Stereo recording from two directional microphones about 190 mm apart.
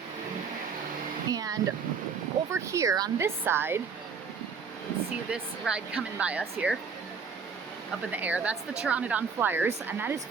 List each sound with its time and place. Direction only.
1.3 s a sound: 20° right (ahead or behind)
2.5 s speech: 15° right (ahead or behind)
5.3 s speech: 5° right (ahead or behind)
8.1 s speech: 10° right (ahead or behind)